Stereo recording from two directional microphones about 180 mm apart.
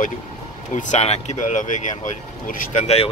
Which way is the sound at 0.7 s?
40° left (ahead or behind).